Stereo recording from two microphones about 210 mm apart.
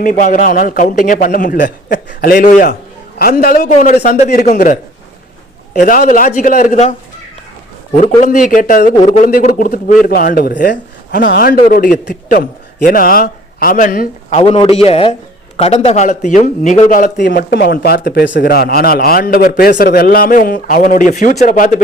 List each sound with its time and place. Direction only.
0.0 s a man's voice: 40° left (ahead or behind)
5.8 s a man's voice: 40° left (ahead or behind)
8.2 s a man's voice: 40° left (ahead or behind)
14.3 s a man's voice: 25° left (ahead or behind)